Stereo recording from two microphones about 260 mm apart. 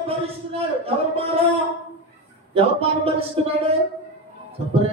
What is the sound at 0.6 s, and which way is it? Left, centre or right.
Speech, right.